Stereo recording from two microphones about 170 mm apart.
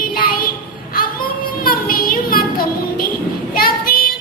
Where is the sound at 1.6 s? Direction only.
60° left (ahead or behind).